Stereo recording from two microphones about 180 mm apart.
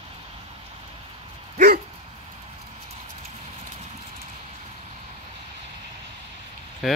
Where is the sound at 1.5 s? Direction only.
50° right (ahead or behind).